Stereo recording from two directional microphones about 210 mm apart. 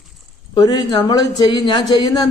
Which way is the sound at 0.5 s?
20° left (ahead or behind).